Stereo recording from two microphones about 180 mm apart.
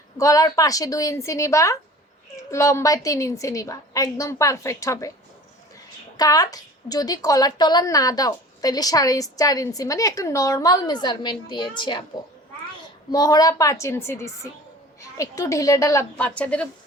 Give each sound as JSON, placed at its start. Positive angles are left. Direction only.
{"t": 0.2, "sound": "a woman's voice", "side_deg": 20}
{"t": 6.1, "sound": "a woman's voice", "side_deg": 20}
{"t": 13.1, "sound": "a woman's voice", "side_deg": 20}